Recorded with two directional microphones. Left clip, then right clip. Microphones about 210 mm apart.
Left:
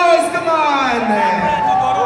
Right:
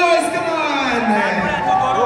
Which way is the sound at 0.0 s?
5° right (ahead or behind).